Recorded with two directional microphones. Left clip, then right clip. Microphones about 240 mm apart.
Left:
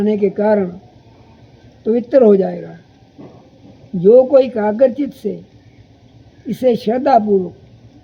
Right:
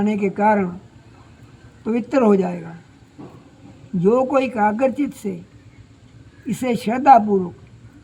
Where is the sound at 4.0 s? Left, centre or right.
Right.